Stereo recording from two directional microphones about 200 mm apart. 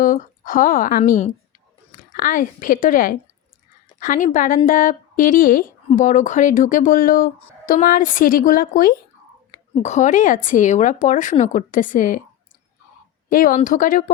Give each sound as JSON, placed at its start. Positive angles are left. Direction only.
{"t": 0.0, "sound": "a woman's voice", "side_deg": 40}
{"t": 13.3, "sound": "a woman's voice", "side_deg": 45}